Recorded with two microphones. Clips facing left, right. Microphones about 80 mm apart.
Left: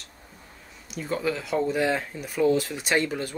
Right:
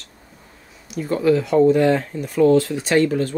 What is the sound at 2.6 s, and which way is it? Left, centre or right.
Speech, centre.